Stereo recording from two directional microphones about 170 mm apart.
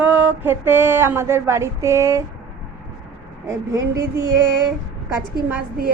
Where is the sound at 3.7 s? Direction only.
15° right (ahead or behind).